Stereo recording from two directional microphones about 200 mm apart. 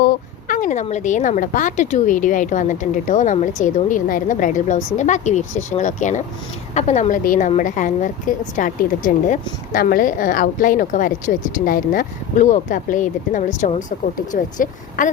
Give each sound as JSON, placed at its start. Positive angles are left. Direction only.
{"t": 0.0, "sound": "a woman's voice", "side_deg": 40}